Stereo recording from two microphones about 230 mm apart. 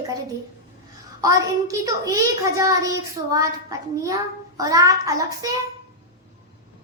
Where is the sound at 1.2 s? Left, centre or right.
Centre.